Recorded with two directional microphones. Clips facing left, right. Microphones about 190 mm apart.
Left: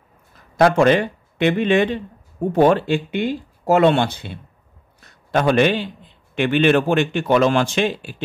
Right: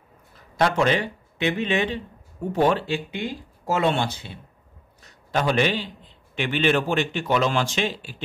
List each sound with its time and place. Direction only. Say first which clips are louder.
0.6 s a man's voice: left 7 dB; 50° left (ahead or behind)